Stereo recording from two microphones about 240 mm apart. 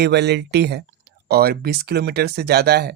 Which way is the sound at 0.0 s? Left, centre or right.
Right.